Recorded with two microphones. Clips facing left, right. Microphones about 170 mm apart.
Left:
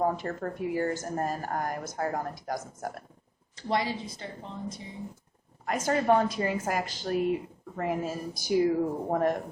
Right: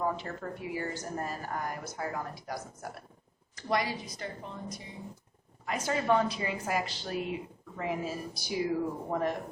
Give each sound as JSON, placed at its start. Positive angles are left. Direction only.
{"t": 0.0, "sound": "speech", "side_deg": 45}
{"t": 3.5, "sound": "a woman's voice", "side_deg": 25}
{"t": 5.6, "sound": "speech", "side_deg": 45}